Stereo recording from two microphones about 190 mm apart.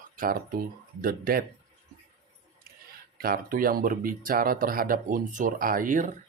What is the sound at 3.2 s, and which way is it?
Speech, 50° right (ahead or behind).